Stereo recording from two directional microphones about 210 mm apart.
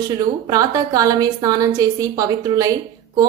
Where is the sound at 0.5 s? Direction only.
15° right (ahead or behind).